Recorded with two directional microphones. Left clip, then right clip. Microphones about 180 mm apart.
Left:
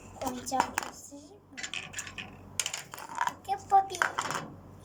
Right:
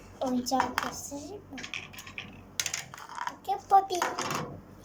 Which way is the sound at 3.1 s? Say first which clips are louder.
Left 4 dB; 20° left (ahead or behind).